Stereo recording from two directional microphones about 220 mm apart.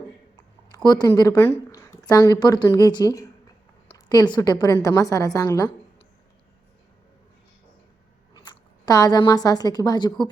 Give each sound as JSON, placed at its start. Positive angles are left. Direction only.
{"t": 0.9, "sound": "a woman's voice", "side_deg": 15}
{"t": 8.3, "sound": "speech", "side_deg": 20}